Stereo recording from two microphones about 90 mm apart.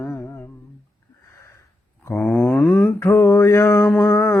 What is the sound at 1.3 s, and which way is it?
Sniff, 30° left (ahead or behind).